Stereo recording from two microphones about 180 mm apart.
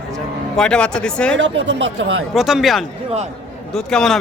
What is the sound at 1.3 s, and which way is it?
Speech, 90° right.